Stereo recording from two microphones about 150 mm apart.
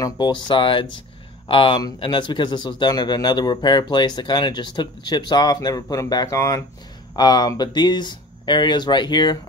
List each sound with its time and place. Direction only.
0.0 s speech: 30° left (ahead or behind)